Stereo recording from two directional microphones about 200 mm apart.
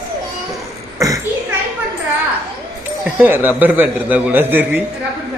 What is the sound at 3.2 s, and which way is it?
A man's voice, 10° right (ahead or behind).